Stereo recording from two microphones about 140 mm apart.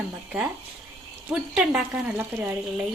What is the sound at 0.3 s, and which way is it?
Speech, 10° right (ahead or behind).